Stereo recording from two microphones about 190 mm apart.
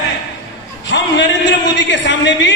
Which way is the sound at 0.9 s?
65° left (ahead or behind).